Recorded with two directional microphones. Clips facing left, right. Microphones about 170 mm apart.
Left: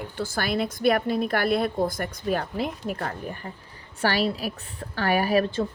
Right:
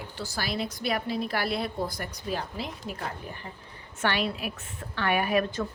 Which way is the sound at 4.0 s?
35° left (ahead or behind).